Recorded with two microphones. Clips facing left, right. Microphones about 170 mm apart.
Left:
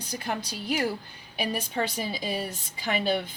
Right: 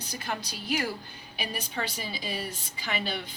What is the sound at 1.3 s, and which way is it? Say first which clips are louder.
A woman's voice: left 6 dB; 50° left (ahead or behind).